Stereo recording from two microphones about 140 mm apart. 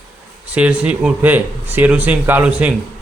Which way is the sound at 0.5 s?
10° right (ahead or behind).